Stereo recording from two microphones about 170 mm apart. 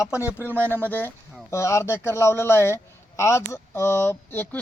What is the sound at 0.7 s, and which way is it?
Speech, 10° left (ahead or behind).